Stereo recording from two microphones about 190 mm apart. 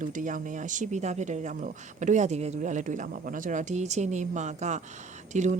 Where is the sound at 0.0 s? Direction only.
40° right (ahead or behind).